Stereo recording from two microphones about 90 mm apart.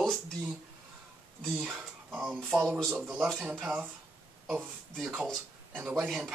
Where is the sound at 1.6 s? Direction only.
15° right (ahead or behind).